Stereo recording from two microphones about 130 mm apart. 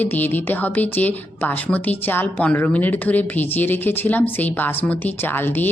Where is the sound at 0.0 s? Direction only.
15° left (ahead or behind).